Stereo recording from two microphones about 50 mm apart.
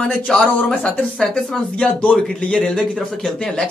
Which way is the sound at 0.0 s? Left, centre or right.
Centre.